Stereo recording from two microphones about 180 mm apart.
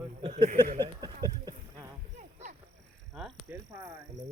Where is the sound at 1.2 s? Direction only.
25° right (ahead or behind).